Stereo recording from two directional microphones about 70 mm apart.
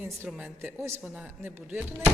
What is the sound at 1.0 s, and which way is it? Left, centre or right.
Speech, centre.